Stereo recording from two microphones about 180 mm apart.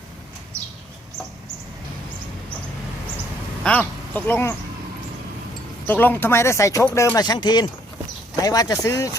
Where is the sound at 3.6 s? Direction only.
10° left (ahead or behind).